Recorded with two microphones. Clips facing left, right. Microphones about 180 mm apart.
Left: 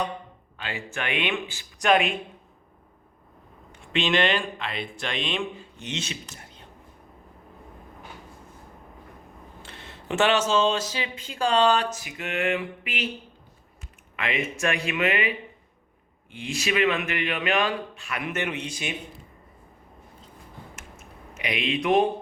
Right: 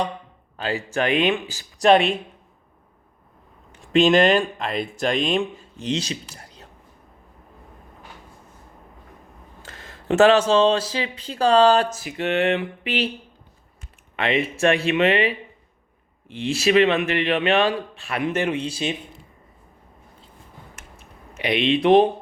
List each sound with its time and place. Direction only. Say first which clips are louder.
0.5 s speech: right 9 dB; 40° right (ahead or behind)
3.9 s speech: right 8 dB; 40° right (ahead or behind)
9.6 s speech: right 8 dB; 40° right (ahead or behind)
14.2 s speech: right 7 dB; 30° right (ahead or behind)
16.6 s speech: right 7 dB; 35° right (ahead or behind)
21.3 s speech: right 7 dB; 30° right (ahead or behind)